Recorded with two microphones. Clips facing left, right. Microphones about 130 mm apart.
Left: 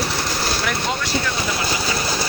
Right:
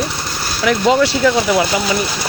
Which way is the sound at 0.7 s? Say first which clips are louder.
Right 11 dB; 90° right.